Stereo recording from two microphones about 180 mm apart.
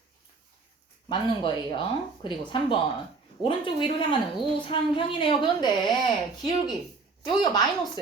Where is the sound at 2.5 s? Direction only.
25° left (ahead or behind).